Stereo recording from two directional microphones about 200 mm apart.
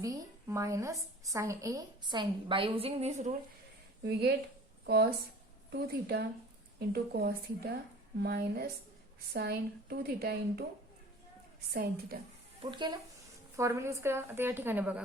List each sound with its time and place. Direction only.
0.0 s a woman's voice: 15° right (ahead or behind); by 3.3 s 35° right (ahead or behind)
4.0 s speech: 55° right (ahead or behind)
5.7 s speech: 55° right (ahead or behind)
11.7 s speech: 50° right (ahead or behind)
12.7 s a woman's voice: 20° right (ahead or behind)